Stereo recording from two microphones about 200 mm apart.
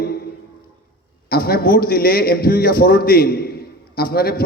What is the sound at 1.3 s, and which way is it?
A man's voice, 50° left (ahead or behind).